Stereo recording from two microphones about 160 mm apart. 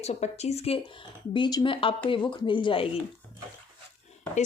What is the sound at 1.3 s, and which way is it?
Speech, 30° left (ahead or behind).